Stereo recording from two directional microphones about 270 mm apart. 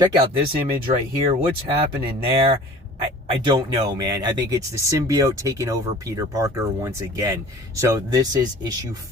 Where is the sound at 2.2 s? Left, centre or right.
Centre.